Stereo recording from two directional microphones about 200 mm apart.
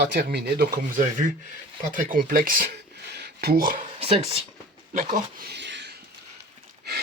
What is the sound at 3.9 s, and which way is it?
Speech, 30° right (ahead or behind).